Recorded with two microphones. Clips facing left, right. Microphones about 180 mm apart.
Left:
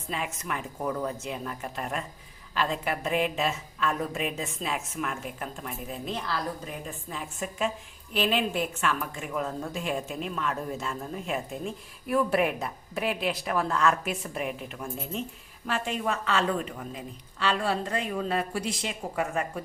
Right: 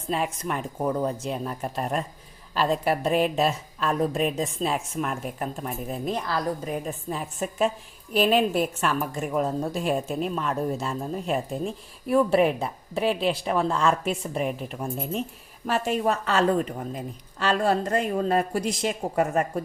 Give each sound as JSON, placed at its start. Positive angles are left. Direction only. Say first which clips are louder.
{"t": 0.1, "sound": "a woman's voice", "louder": "right 6 dB", "side_deg": -35}